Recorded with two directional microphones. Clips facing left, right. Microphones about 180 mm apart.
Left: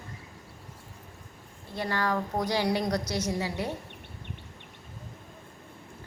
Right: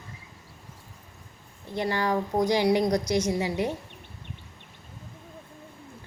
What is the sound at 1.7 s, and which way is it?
A woman's voice, 15° right (ahead or behind).